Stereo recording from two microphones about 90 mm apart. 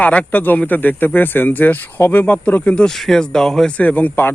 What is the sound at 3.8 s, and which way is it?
Speech, 20° left (ahead or behind).